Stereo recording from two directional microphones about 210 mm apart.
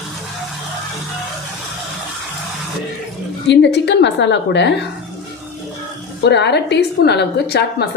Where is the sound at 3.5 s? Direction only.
55° left (ahead or behind).